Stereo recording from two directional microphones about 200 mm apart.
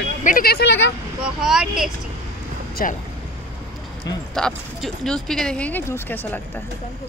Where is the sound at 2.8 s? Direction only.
45° left (ahead or behind).